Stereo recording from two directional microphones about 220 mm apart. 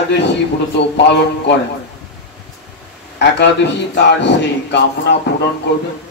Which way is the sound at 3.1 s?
50° left (ahead or behind).